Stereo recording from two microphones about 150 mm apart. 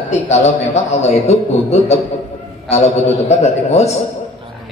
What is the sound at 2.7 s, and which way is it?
A man's voice, 45° left (ahead or behind).